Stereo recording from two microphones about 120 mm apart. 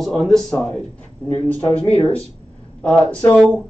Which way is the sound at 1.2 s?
15° left (ahead or behind).